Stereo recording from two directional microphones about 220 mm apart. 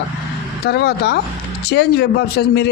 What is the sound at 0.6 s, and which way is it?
A man's voice, 50° left (ahead or behind).